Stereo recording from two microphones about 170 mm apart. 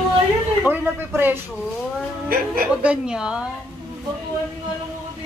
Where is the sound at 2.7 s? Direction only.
5° right (ahead or behind).